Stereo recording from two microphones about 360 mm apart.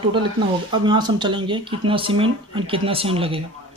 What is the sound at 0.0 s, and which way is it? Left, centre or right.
Speech, centre.